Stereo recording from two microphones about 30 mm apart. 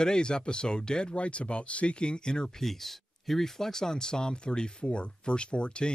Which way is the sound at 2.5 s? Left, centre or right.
Centre.